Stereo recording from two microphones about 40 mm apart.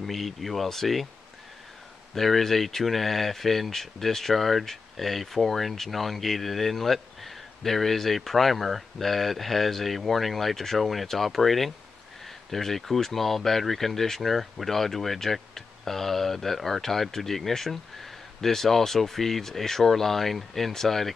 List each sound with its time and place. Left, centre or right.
0.0 s speech: centre
2.1 s speech: centre